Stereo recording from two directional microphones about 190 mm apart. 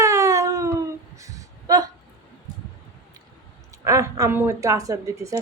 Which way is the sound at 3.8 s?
15° right (ahead or behind).